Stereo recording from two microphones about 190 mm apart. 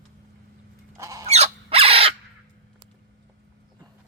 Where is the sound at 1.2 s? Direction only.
35° right (ahead or behind).